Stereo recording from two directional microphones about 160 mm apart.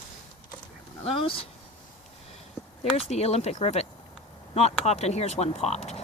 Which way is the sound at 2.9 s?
40° left (ahead or behind).